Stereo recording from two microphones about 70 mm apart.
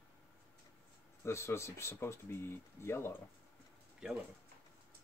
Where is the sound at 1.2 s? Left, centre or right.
Left.